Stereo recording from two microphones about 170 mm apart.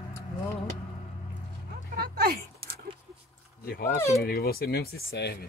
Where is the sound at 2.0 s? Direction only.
65° right (ahead or behind).